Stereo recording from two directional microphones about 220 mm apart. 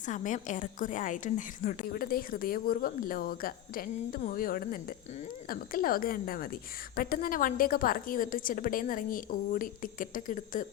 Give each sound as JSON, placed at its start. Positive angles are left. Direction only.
{"t": 0.0, "sound": "a woman's voice", "side_deg": 35}